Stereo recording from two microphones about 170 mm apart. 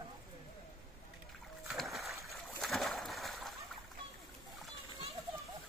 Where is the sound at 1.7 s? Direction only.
Centre (ahead or behind).